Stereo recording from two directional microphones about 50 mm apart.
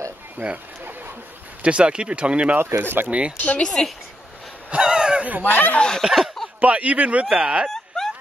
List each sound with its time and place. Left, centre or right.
0.4 s speech: right
1.6 s speech: right
2.8 s speech: right
3.1 s speech: right
3.3 s speech: left
3.6 s speech: centre
4.6 s a sound: centre
5.4 s speech: left
5.8 s speech: centre
6.1 s speech: centre
6.6 s speech: right
7.7 s a sound: centre